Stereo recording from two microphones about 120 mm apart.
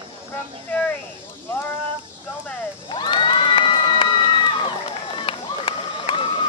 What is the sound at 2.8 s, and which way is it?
Crowd, 45° left (ahead or behind).